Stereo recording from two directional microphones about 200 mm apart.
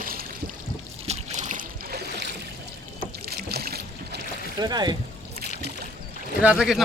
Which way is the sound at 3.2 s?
50° right (ahead or behind).